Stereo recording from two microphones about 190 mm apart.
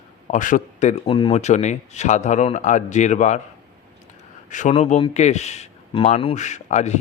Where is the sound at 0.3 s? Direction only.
45° left (ahead or behind).